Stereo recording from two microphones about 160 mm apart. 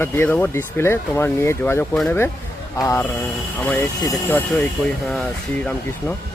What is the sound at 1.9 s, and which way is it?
Speech, centre (ahead or behind).